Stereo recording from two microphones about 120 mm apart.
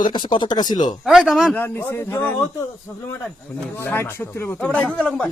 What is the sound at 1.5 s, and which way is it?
Speech, 15° left (ahead or behind).